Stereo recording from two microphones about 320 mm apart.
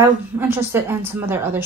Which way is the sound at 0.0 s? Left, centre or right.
Centre.